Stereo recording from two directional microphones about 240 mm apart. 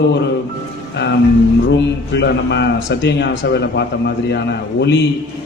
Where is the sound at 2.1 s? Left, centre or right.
Left.